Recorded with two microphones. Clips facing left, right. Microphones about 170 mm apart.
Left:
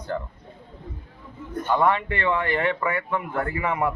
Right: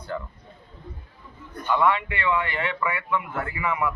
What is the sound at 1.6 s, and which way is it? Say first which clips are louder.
A man's voice: left 1 dB; 45° left (ahead or behind).